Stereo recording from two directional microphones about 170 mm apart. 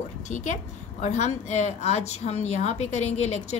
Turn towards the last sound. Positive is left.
turn(degrees=40)  # may be behind; listen again after turning